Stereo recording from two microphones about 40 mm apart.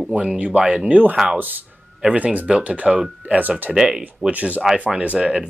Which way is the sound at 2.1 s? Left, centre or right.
Right.